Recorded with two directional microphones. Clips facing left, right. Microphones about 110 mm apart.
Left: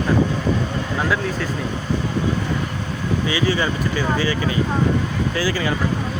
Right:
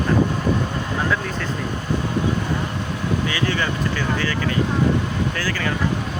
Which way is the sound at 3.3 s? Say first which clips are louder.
Left 2 dB; 15° left (ahead or behind).